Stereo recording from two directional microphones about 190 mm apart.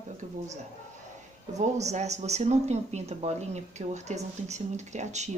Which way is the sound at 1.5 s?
35° right (ahead or behind).